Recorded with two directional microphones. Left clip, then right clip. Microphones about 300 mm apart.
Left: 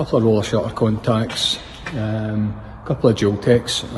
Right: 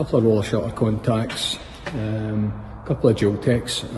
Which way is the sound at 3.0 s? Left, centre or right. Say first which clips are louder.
Left 2 dB; centre.